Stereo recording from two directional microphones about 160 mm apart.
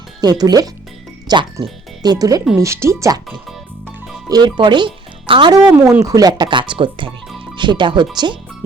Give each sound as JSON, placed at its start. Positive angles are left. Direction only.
{"t": 0.2, "sound": "speech", "side_deg": -25}
{"t": 4.3, "sound": "speech", "side_deg": -25}
{"t": 5.7, "sound": "speech", "side_deg": -15}